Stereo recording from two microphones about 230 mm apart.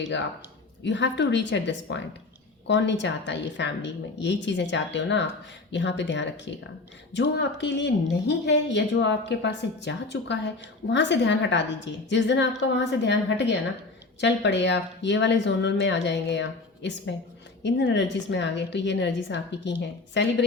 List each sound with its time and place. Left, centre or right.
0.9 s a woman's voice: left